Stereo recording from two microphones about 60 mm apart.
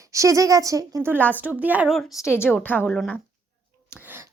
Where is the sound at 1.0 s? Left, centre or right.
Right.